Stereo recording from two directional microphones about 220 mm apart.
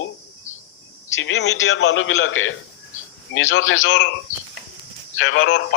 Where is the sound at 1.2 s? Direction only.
65° left (ahead or behind).